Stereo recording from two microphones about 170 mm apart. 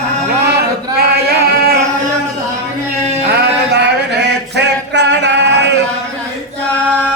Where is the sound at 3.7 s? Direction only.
80° right.